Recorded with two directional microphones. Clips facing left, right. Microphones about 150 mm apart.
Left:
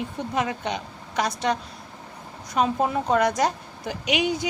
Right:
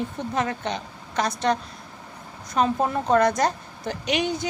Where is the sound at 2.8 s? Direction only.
5° left (ahead or behind).